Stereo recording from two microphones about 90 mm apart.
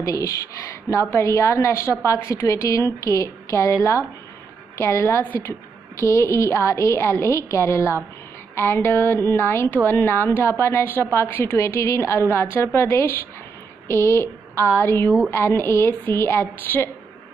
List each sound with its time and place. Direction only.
0.0 s a woman's voice: 35° left (ahead or behind)
5.2 s a woman's voice: 20° left (ahead or behind)
5.5 s a woman's voice: 35° left (ahead or behind)